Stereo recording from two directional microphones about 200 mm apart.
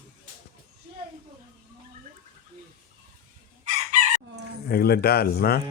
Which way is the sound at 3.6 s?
40° right (ahead or behind).